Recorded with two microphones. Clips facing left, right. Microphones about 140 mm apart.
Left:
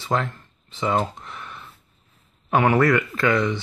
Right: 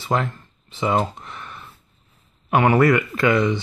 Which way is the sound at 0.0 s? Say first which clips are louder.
Right 2 dB; 10° right (ahead or behind).